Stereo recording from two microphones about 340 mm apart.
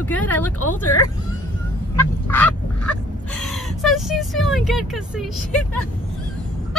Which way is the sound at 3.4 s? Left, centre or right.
Centre.